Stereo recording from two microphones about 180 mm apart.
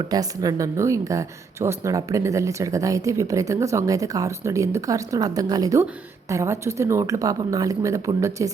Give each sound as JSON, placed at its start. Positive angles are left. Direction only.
{"t": 0.1, "sound": "a woman's voice", "side_deg": -20}